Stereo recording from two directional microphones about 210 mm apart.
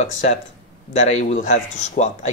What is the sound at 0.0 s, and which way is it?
Speech, 35° left (ahead or behind).